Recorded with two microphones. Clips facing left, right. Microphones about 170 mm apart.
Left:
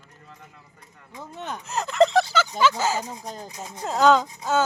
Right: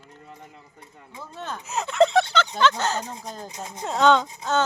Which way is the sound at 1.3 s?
15° left (ahead or behind).